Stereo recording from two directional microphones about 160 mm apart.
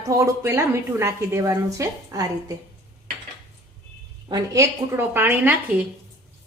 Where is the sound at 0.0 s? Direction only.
20° right (ahead or behind).